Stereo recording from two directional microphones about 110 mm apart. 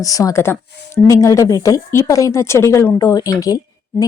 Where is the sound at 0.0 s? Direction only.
30° left (ahead or behind).